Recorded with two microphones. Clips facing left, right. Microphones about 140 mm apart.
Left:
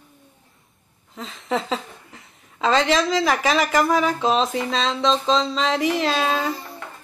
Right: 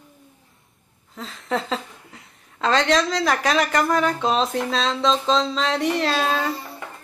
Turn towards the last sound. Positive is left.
turn(degrees=0)  # may be behind; listen again after turning